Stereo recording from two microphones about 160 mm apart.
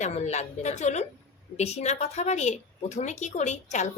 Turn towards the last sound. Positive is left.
turn(degrees=45)  # may be behind; listen again after turning